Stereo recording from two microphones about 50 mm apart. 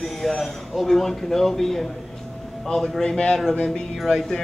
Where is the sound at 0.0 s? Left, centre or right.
Centre.